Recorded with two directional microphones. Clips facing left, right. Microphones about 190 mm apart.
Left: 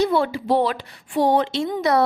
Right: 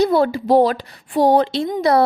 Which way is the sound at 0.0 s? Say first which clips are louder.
Right 4 dB; 40° right (ahead or behind).